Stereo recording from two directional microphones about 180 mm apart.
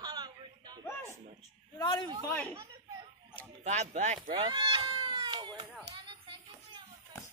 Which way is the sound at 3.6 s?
40° right (ahead or behind).